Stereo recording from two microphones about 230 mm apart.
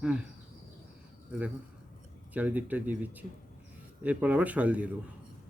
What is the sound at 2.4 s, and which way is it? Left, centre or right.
Speech, centre.